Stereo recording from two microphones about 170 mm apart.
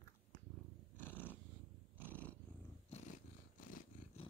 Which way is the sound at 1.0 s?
10° left (ahead or behind).